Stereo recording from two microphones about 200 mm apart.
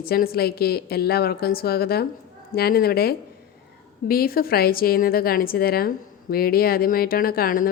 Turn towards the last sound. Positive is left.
turn(degrees=45)  # may be behind; listen again after turning